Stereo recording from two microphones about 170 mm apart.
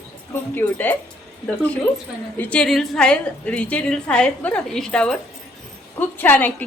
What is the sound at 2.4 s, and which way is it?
A woman's voice, 5° left (ahead or behind).